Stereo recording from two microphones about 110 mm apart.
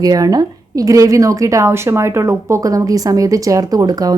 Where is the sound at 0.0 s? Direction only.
35° right (ahead or behind).